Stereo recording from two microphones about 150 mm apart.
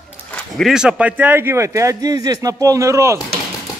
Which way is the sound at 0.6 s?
5° right (ahead or behind).